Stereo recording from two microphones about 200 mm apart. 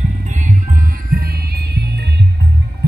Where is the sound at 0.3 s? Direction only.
40° right (ahead or behind).